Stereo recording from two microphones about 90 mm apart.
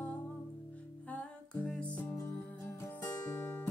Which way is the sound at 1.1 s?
15° left (ahead or behind).